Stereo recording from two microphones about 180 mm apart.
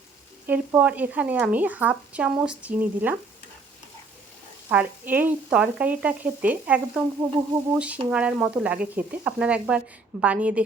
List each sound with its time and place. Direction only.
0.4 s speech: 10° right (ahead or behind)
4.7 s speech: 10° right (ahead or behind)